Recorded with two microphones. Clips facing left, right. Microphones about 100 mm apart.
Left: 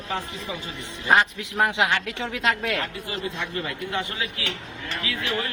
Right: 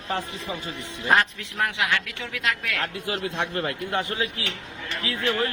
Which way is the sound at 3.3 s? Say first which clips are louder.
Right 3 dB; 65° right (ahead or behind).